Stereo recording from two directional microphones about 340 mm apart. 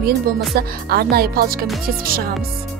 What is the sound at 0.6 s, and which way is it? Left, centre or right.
Speech, right.